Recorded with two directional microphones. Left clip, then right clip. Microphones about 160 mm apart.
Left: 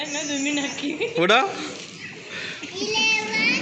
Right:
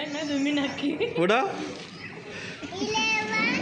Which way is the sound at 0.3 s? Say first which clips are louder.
Even; 75° right (ahead or behind).